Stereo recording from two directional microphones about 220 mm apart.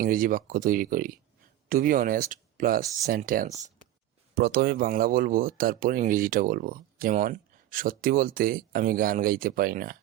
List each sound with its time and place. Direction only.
0.0 s speech: 40° right (ahead or behind)